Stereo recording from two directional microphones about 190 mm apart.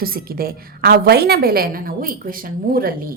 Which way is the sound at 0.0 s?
50° right (ahead or behind).